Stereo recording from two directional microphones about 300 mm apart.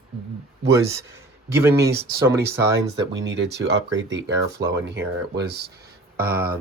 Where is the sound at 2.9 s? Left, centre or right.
Right.